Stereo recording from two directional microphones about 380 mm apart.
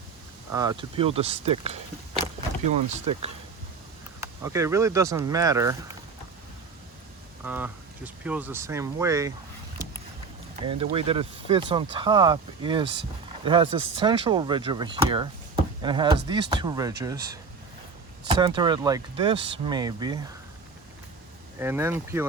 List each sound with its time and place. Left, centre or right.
0.5 s speech: centre
7.4 s speech: centre
10.8 s speech: centre
18.3 s speech: centre
21.6 s speech: centre